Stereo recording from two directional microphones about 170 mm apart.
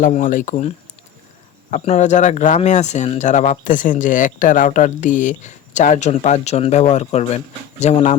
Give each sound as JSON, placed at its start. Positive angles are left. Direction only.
{"t": 0.0, "sound": "speech", "side_deg": 50}
{"t": 1.7, "sound": "speech", "side_deg": 40}